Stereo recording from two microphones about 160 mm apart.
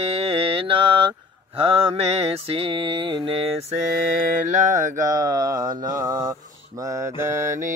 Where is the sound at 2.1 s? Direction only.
40° right (ahead or behind).